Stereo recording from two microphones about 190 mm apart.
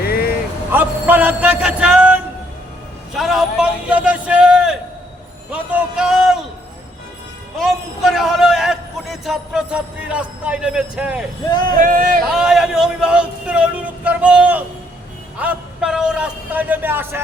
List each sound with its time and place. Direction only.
0.0 s vehicle: 55° left (ahead or behind)
0.7 s speech: 10° right (ahead or behind)
3.2 s a man's voice: centre (ahead or behind)
5.5 s a sound: 5° right (ahead or behind)
7.6 s a man's voice: centre (ahead or behind)
11.4 s speech: 20° left (ahead or behind)
11.8 s speech: 45° right (ahead or behind)
12.3 s a man's voice: 5° right (ahead or behind)